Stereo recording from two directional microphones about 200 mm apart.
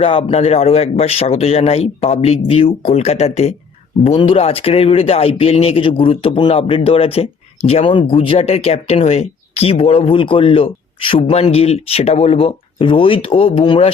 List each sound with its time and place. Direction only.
0.0 s speech: 30° left (ahead or behind)